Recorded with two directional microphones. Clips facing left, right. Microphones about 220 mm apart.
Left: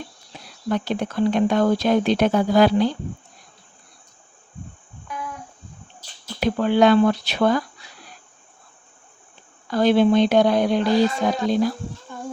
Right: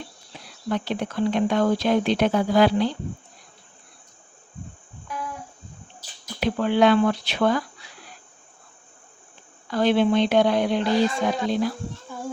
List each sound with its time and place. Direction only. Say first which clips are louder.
0.7 s speech: left 3 dB; 45° left (ahead or behind)
5.0 s music: even; centre (ahead or behind)
6.4 s speech: left 2 dB; 40° left (ahead or behind)
9.6 s speech: left 3 dB; 40° left (ahead or behind)
12.1 s child singing: right 1 dB; 5° right (ahead or behind)